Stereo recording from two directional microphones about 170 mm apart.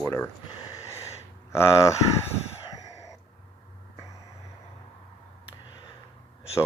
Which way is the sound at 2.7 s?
20° left (ahead or behind).